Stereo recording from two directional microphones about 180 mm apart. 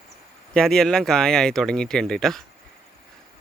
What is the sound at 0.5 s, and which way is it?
Speech, 5° left (ahead or behind).